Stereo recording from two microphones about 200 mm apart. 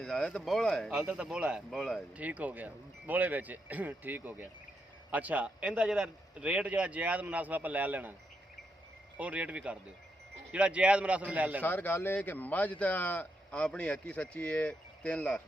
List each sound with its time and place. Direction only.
0.0 s speech: 5° left (ahead or behind)
9.1 s speech: 5° right (ahead or behind)
11.6 s speech: 10° left (ahead or behind)